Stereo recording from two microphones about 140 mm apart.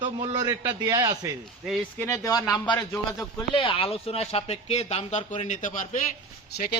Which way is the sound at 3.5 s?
40° left (ahead or behind).